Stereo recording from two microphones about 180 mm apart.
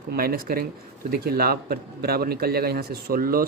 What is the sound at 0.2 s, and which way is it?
Speech, 55° right (ahead or behind).